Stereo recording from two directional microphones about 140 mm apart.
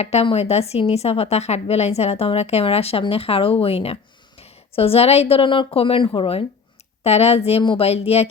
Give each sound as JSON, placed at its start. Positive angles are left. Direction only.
{"t": 0.0, "sound": "a woman's voice", "side_deg": 50}